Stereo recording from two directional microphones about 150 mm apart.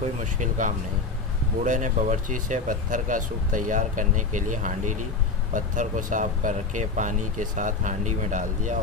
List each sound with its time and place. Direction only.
0.2 s speech: 55° right (ahead or behind)